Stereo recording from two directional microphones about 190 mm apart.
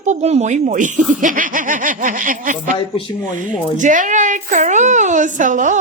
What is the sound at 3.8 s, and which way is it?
A woman's voice, 40° right (ahead or behind).